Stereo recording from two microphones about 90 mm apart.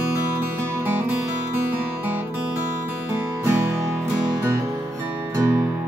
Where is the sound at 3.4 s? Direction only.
25° right (ahead or behind).